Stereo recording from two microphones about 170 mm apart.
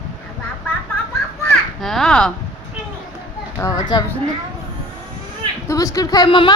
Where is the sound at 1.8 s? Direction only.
Centre (ahead or behind).